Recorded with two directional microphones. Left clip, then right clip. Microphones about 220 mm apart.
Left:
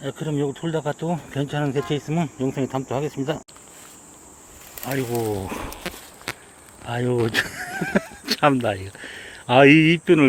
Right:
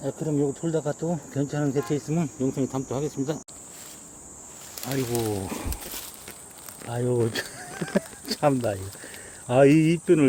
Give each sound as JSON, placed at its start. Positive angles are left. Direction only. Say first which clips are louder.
{"t": 0.0, "sound": "speech", "louder": "left 1 dB", "side_deg": 10}
{"t": 4.7, "sound": "speech", "louder": "left 3 dB", "side_deg": 15}
{"t": 5.3, "sound": "speech", "louder": "left 3 dB", "side_deg": 0}
{"t": 6.9, "sound": "speech", "louder": "left 4 dB", "side_deg": 15}